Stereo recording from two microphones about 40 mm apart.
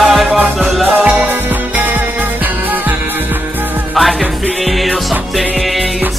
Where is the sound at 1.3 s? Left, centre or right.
Right.